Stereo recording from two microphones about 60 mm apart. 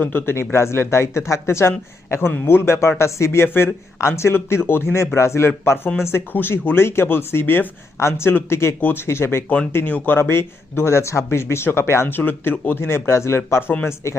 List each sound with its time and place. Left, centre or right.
0.0 s speech: left
6.3 s speech: left
7.9 s speech: left
8.8 s speech: left
9.0 s speech: left
12.0 s speech: left